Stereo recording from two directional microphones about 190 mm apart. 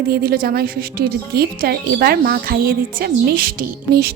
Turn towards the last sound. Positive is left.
turn(degrees=-50)  # may be behind; listen again after turning